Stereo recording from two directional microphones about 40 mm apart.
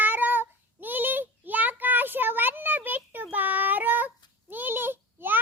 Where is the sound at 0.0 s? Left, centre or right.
Right.